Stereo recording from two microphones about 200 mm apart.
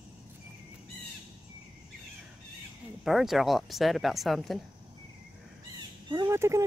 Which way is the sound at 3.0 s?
Centre (ahead or behind).